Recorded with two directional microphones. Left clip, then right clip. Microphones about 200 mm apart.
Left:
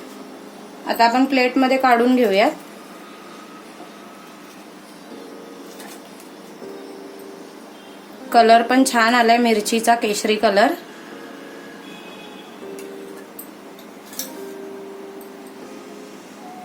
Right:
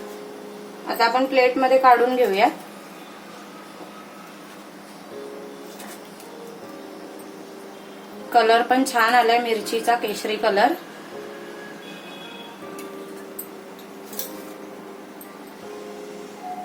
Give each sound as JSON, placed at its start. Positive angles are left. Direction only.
{"t": 0.9, "sound": "a woman's voice", "side_deg": 55}
{"t": 8.3, "sound": "speech", "side_deg": 55}